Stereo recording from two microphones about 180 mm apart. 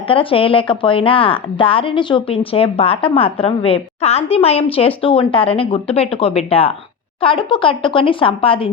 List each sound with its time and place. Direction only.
0.1 s a woman's voice: 30° left (ahead or behind)